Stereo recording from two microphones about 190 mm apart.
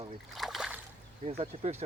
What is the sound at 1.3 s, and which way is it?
Speech, 30° right (ahead or behind).